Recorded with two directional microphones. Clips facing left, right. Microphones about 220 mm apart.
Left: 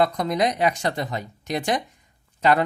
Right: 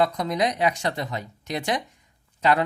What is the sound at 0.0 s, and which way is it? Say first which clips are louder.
Speech: left 2 dB; 50° left (ahead or behind).